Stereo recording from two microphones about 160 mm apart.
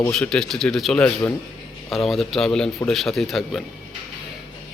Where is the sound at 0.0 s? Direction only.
5° left (ahead or behind).